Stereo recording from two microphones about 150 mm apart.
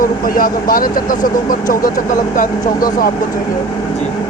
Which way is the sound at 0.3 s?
70° left (ahead or behind).